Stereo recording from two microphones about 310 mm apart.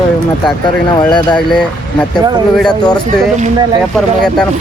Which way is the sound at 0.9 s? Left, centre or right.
Centre.